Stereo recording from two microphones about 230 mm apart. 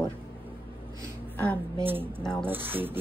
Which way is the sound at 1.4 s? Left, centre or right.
Centre.